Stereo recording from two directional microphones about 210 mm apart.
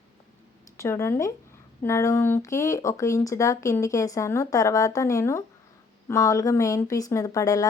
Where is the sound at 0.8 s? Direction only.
15° left (ahead or behind).